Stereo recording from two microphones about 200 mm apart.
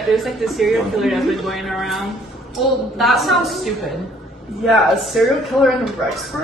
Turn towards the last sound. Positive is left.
turn(degrees=0)  # may be behind; listen again after turning